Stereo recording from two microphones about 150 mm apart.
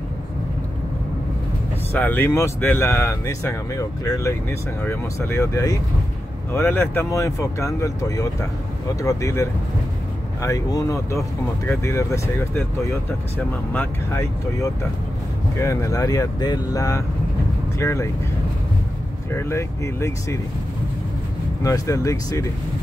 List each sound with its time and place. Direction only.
1.9 s speech: 10° left (ahead or behind)
19.3 s speech: 15° left (ahead or behind)
21.6 s speech: 20° left (ahead or behind)